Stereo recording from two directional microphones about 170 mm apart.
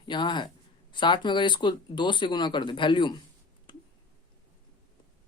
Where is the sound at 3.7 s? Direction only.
30° left (ahead or behind).